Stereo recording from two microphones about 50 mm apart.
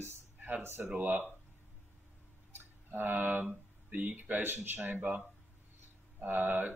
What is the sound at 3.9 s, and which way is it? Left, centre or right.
A man's voice, right.